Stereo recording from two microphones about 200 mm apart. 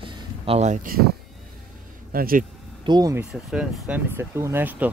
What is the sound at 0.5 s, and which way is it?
Speech, 35° right (ahead or behind).